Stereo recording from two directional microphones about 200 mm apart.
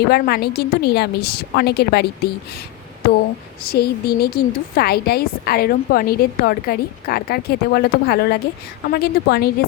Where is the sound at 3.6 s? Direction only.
50° left (ahead or behind).